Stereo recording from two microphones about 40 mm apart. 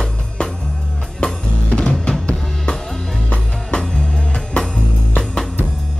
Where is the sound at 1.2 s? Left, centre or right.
Left.